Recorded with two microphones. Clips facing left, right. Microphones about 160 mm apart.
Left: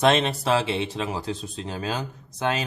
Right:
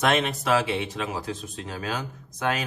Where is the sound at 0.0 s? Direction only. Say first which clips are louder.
Left 3 dB; 30° left (ahead or behind).